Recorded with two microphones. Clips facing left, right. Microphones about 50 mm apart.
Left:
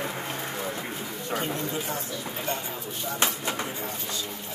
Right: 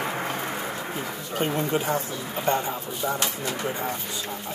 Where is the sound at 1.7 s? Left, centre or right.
Right.